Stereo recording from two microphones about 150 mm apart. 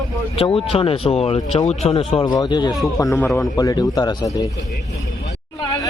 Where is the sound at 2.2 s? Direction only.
30° left (ahead or behind).